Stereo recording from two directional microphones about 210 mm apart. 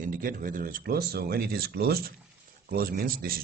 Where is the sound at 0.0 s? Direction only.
40° right (ahead or behind).